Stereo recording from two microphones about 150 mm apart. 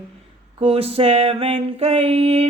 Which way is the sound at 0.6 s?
40° right (ahead or behind).